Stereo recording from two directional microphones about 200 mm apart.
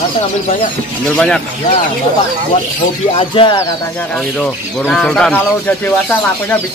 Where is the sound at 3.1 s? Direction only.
25° left (ahead or behind).